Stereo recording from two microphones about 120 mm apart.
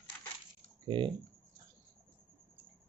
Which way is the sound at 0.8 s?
45° right (ahead or behind).